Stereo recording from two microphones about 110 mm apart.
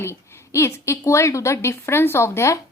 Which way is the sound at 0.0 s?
25° left (ahead or behind).